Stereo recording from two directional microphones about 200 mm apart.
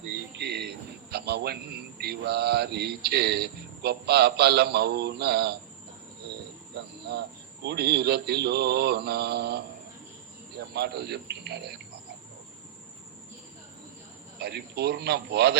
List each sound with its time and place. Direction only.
0.3 s a man's voice: 55° right (ahead or behind)
7.1 s a man's voice: 55° right (ahead or behind)
10.8 s a man's voice: 55° right (ahead or behind)
14.3 s a man's voice: 55° right (ahead or behind)